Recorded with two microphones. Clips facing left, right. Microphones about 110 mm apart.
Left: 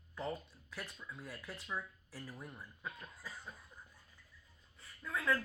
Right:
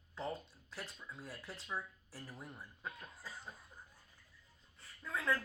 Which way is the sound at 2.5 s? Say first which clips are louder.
Even; 5° right (ahead or behind).